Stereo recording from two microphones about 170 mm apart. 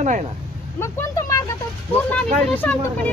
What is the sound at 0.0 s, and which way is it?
Speech, 45° right (ahead or behind).